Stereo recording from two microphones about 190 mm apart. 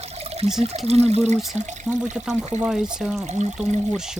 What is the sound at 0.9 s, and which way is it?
Speech, 35° right (ahead or behind).